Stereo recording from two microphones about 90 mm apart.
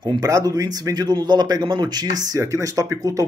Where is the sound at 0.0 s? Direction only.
50° right (ahead or behind).